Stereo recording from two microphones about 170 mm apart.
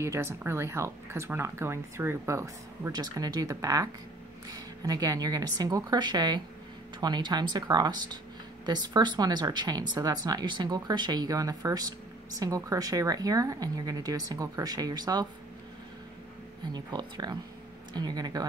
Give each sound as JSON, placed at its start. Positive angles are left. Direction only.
{"t": 0.0, "sound": "speech", "side_deg": -15}
{"t": 16.7, "sound": "speech", "side_deg": -25}